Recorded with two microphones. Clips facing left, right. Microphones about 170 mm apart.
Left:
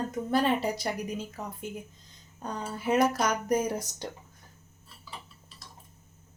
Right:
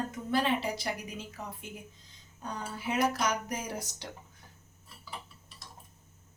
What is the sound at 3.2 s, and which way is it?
Speech, 45° left (ahead or behind).